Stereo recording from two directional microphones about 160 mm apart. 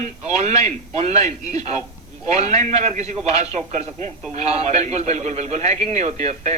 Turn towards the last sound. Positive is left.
turn(degrees=-45)  # may be behind; listen again after turning